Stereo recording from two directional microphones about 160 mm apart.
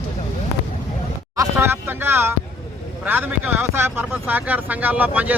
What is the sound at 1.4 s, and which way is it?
Speech, 15° right (ahead or behind).